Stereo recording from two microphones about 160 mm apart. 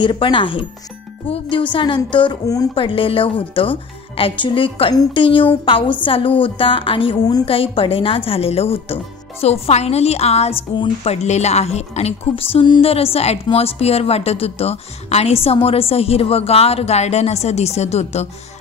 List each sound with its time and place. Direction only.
0.0 s a woman's voice: 30° left (ahead or behind)